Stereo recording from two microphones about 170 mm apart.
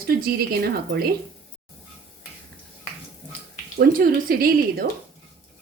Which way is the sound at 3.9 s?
60° right (ahead or behind).